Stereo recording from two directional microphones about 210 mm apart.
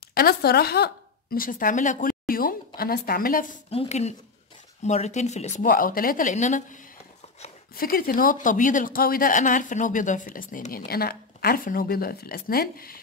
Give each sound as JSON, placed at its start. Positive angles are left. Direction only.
{"t": 0.1, "sound": "speech", "side_deg": 45}
{"t": 3.7, "sound": "speech", "side_deg": 30}